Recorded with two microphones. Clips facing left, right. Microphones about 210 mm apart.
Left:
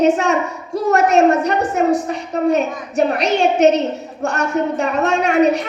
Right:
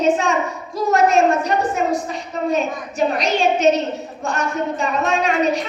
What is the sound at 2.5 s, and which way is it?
A woman's voice, 65° left (ahead or behind).